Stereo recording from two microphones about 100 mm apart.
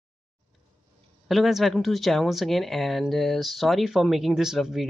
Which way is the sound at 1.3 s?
Centre (ahead or behind).